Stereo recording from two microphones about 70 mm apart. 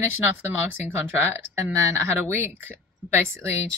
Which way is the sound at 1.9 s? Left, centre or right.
Right.